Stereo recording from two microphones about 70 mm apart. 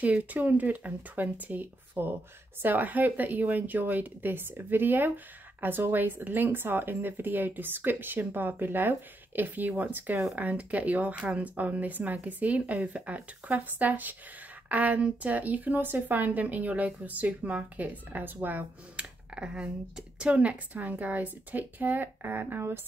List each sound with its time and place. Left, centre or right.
0.0 s speech: right